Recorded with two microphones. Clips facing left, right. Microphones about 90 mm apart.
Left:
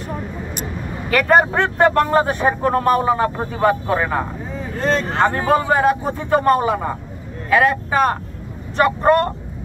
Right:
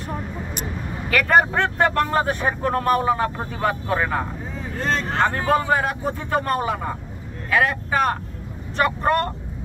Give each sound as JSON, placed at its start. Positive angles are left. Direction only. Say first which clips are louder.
{"t": 1.1, "sound": "speech", "louder": "left 3 dB", "side_deg": 30}
{"t": 4.8, "sound": "speech", "louder": "left 4 dB", "side_deg": 10}
{"t": 5.7, "sound": "speech", "louder": "left 5 dB", "side_deg": 25}